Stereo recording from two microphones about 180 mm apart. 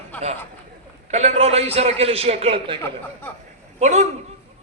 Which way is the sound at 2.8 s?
10° left (ahead or behind).